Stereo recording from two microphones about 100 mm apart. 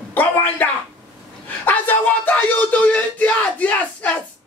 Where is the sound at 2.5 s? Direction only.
15° left (ahead or behind).